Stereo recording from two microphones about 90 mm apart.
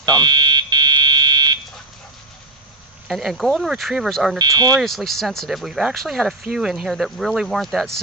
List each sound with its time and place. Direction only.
0.0 s fire alarm: 50° right (ahead or behind)
3.1 s speech: centre (ahead or behind)
4.4 s speech: 45° right (ahead or behind)
4.8 s speech: centre (ahead or behind)